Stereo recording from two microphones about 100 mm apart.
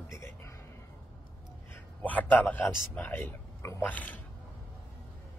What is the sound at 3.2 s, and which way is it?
Whispering, 30° left (ahead or behind).